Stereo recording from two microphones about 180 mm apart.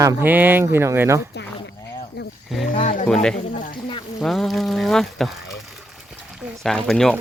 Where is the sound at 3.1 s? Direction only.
5° left (ahead or behind).